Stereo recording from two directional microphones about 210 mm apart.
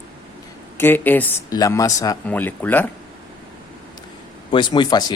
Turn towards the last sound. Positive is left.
turn(degrees=20)  # may be behind; listen again after turning